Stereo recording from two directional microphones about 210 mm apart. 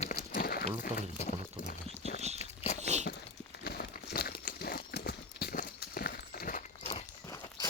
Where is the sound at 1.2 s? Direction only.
35° left (ahead or behind).